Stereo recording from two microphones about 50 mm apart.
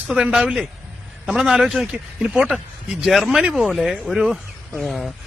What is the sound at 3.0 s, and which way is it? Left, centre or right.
Speech, centre.